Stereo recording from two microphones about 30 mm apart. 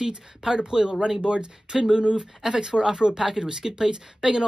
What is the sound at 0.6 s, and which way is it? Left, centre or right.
Speech, right.